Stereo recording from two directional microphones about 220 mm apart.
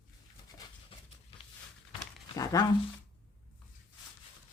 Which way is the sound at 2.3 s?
15° left (ahead or behind).